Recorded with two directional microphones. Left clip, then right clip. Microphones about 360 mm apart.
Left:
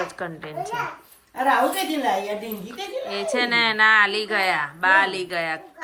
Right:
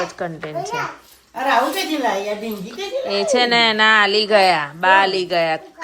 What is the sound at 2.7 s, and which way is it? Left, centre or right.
A woman's voice, centre.